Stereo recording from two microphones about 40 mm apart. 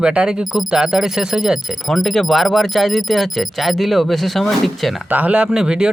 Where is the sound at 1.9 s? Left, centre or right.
Centre.